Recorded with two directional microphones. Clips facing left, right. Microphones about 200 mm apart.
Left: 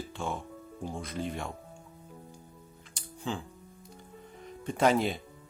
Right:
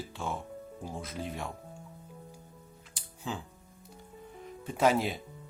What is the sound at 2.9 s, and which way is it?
Music, 5° right (ahead or behind).